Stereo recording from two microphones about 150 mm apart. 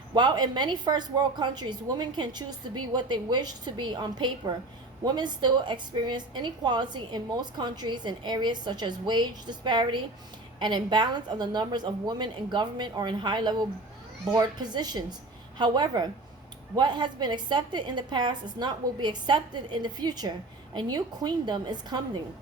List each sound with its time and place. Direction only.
0.1 s a woman's voice: 30° right (ahead or behind)